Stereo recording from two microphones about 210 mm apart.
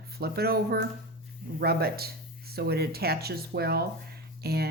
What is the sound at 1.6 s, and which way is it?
Speech, 50° right (ahead or behind).